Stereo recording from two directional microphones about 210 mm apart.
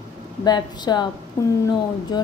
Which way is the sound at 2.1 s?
20° left (ahead or behind).